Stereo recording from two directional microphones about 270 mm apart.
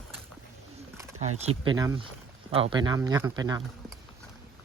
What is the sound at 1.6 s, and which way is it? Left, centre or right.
Speech, centre.